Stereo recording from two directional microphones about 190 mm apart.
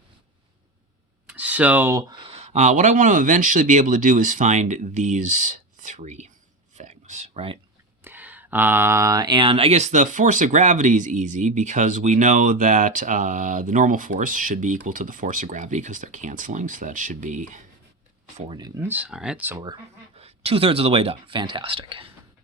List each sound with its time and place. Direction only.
1.3 s speech: 5° right (ahead or behind)
2.3 s speech: 35° right (ahead or behind)
6.7 s a sound: 40° right (ahead or behind)
8.0 s speech: 10° right (ahead or behind); by 17.6 s 40° right (ahead or behind)
18.5 s speech: 20° right (ahead or behind)
18.9 s speech: 5° right (ahead or behind)
20.1 s speech: 30° right (ahead or behind)